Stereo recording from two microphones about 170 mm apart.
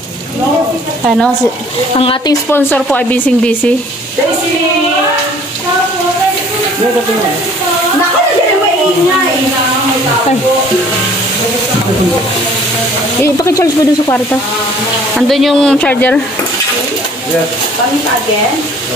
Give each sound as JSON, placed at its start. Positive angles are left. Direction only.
{"t": 1.0, "sound": "speech", "side_deg": 0}
{"t": 2.0, "sound": "speech", "side_deg": 30}
{"t": 2.5, "sound": "speech", "side_deg": 10}
{"t": 13.2, "sound": "speech", "side_deg": 15}
{"t": 15.1, "sound": "speech", "side_deg": 0}